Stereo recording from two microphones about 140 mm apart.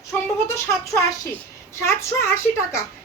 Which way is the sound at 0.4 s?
20° left (ahead or behind).